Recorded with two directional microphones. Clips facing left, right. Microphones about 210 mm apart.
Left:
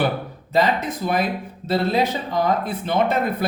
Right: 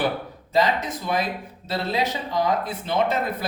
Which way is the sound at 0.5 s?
55° left (ahead or behind).